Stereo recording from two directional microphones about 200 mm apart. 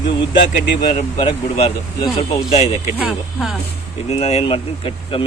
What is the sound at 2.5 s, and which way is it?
Speech, 35° left (ahead or behind).